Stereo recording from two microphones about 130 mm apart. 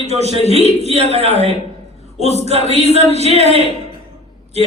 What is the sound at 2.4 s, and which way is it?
A man's voice, 55° right (ahead or behind).